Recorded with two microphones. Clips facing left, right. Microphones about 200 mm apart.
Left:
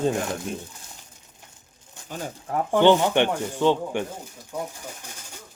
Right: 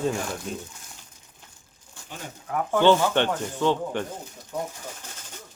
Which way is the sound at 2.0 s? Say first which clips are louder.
Left 4 dB; 30° left (ahead or behind).